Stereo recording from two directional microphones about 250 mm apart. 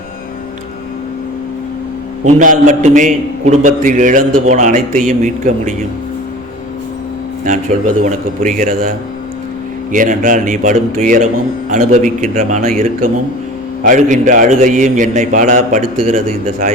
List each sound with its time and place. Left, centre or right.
2.2 s a man's voice: right
8.0 s a man's voice: right